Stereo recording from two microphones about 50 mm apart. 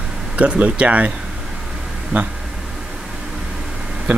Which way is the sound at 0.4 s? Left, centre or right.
Right.